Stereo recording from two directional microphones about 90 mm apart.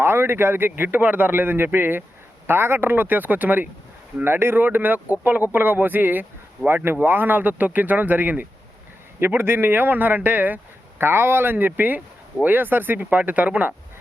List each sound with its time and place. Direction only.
0.0 s speech: 25° right (ahead or behind)